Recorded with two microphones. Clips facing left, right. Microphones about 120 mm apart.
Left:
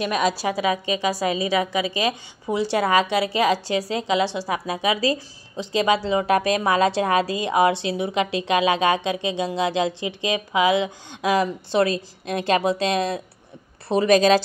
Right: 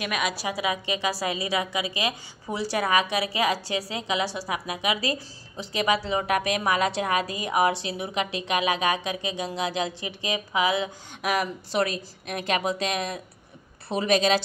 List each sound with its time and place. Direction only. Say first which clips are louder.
0.0 s a woman's voice: left 6 dB; 30° left (ahead or behind)